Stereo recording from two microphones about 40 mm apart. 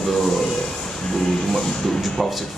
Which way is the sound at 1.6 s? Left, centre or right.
Centre.